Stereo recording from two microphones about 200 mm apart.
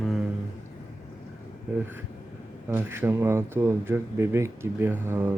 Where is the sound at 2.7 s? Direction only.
10° right (ahead or behind).